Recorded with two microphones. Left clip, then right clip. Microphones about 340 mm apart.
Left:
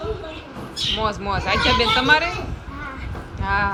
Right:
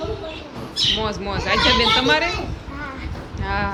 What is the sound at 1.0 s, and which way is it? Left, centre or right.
Speech, centre.